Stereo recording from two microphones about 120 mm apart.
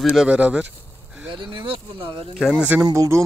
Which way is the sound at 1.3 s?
50° right (ahead or behind).